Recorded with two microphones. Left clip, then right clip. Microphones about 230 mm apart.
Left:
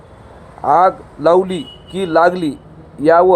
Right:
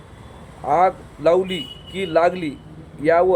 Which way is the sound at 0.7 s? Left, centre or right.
Centre.